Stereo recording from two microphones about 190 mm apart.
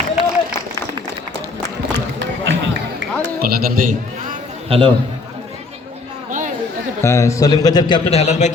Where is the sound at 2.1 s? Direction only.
75° right (ahead or behind).